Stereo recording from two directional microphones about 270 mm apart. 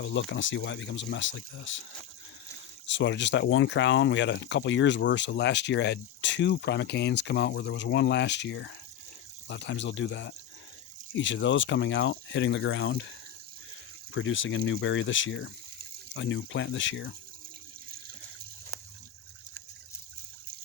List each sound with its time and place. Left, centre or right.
0.0 s speech: left
2.8 s speech: left
14.1 s speech: left